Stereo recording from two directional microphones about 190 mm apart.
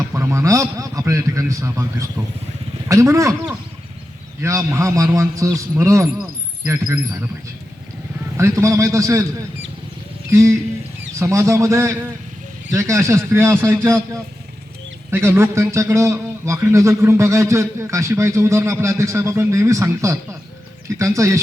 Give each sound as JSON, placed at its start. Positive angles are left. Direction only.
{"t": 0.1, "sound": "a man's voice", "side_deg": -15}
{"t": 8.4, "sound": "a man's voice", "side_deg": -15}
{"t": 10.3, "sound": "a man's voice", "side_deg": -15}